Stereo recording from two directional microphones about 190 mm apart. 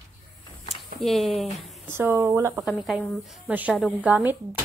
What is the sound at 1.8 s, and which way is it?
Speech, 10° right (ahead or behind).